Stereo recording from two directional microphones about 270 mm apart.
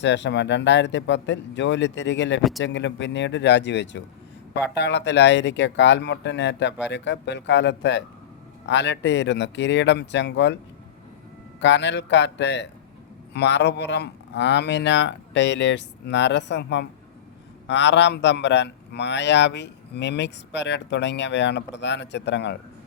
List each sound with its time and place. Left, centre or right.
0.0 s a man's voice: left
2.4 s speech: centre
2.6 s a man's voice: left
11.6 s a man's voice: left